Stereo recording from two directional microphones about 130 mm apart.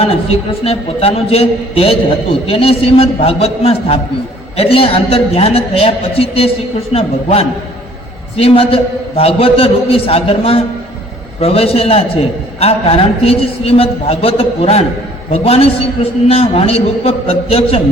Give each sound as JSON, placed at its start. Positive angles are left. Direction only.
{"t": 0.6, "sound": "a man's voice", "side_deg": 50}